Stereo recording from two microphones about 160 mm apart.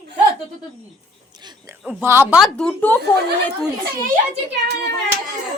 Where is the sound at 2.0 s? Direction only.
15° right (ahead or behind).